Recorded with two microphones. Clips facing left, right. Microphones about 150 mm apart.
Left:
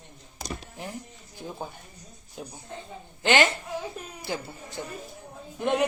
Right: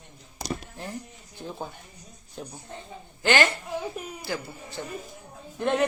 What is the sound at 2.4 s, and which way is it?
Speech, 10° left (ahead or behind).